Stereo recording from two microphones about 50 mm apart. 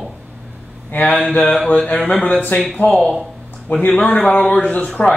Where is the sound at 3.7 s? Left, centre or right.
Left.